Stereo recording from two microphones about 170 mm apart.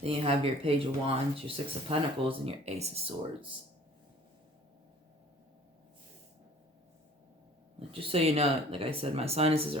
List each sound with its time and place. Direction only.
0.0 s speech: 35° right (ahead or behind)
7.8 s speech: 35° right (ahead or behind)